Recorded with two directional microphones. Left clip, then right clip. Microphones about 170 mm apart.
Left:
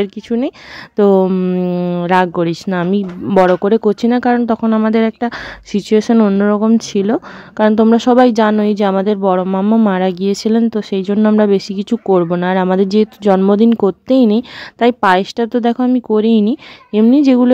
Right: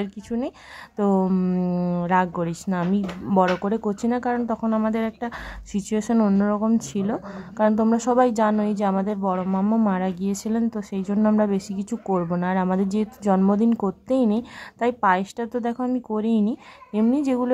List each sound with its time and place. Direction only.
0.0 s speech: 35° left (ahead or behind)
1.9 s speech: 40° left (ahead or behind)
6.4 s speech: 40° left (ahead or behind)